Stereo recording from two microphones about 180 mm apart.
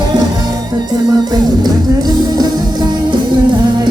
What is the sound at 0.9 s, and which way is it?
Music, 20° right (ahead or behind).